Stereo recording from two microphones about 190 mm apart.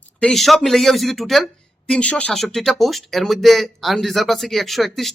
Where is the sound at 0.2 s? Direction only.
5° left (ahead or behind).